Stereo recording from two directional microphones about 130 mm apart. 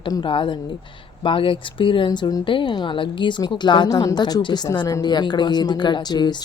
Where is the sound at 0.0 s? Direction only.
40° left (ahead or behind).